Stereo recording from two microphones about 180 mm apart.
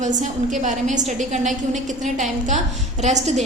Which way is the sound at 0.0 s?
45° right (ahead or behind).